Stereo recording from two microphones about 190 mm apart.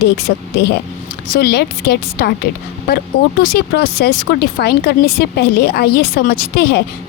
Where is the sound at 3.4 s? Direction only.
55° left (ahead or behind).